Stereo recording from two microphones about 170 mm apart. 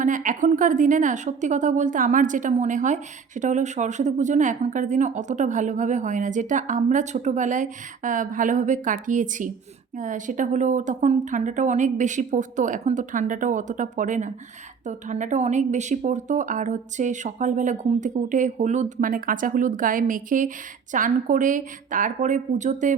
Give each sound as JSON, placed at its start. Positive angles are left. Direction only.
{"t": 0.0, "sound": "a woman's voice", "side_deg": -50}